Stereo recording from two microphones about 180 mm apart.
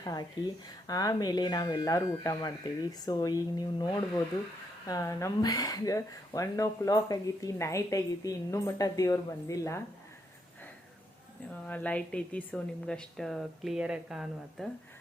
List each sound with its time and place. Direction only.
0.0 s speech: 20° left (ahead or behind)
11.6 s a woman's voice: 5° left (ahead or behind)